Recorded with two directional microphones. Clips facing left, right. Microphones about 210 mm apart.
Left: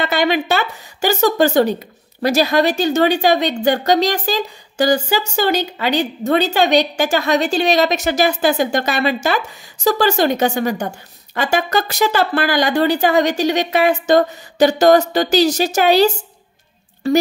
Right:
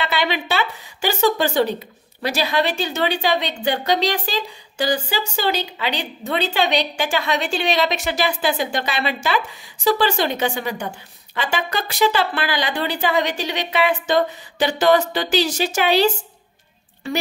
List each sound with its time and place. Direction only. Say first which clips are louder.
0.0 s a woman's voice: left 6 dB; 45° left (ahead or behind)